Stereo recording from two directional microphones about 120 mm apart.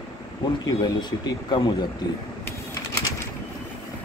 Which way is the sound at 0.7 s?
35° left (ahead or behind).